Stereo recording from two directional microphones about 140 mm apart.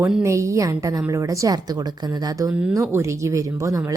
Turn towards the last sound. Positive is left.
turn(degrees=-25)  # may be behind; listen again after turning